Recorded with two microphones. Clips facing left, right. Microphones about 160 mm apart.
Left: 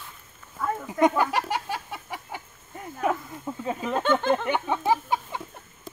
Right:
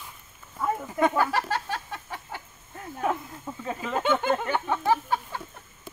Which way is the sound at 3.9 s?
5° right (ahead or behind).